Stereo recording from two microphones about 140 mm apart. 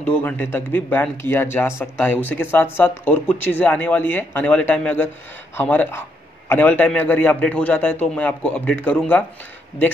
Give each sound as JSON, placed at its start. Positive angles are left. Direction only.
{"t": 0.0, "sound": "a man's voice", "side_deg": 10}